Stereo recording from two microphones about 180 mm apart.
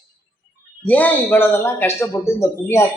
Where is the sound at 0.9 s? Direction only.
10° left (ahead or behind).